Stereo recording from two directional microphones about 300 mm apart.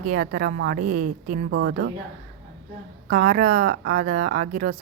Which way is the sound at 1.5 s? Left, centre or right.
Right.